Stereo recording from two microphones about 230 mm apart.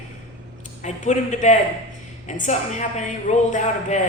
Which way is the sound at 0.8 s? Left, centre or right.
Left.